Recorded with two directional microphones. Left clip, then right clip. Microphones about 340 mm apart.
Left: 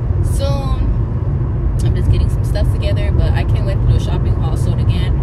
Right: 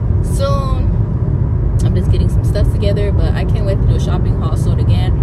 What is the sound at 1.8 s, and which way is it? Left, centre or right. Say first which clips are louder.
Speech: right 3 dB; centre.